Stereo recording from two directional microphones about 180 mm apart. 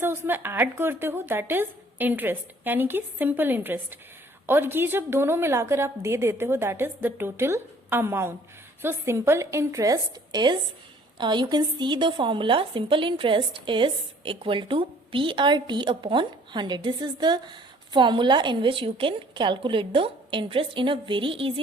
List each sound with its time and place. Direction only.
0.0 s a woman's voice: 10° right (ahead or behind); by 21.6 s 30° right (ahead or behind)